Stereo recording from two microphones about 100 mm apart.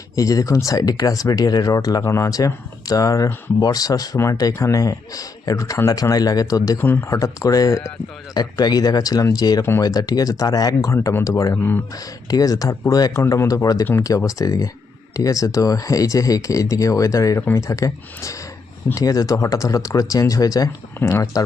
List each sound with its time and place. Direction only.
0.2 s speech: 35° left (ahead or behind)
6.7 s speech: 20° left (ahead or behind)
7.1 s speech: 35° left (ahead or behind)
11.5 s speech: 20° left (ahead or behind)
11.9 s speech: 35° left (ahead or behind)